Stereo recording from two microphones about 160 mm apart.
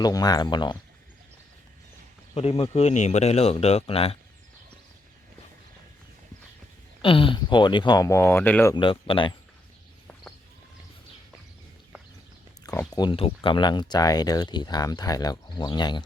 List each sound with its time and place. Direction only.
0.0 s speech: 25° left (ahead or behind)
2.3 s speech: 40° left (ahead or behind)
7.0 s speech: 35° left (ahead or behind); by 8.7 s 10° left (ahead or behind)
8.7 s speech: 30° left (ahead or behind)
12.9 s speech: 30° left (ahead or behind)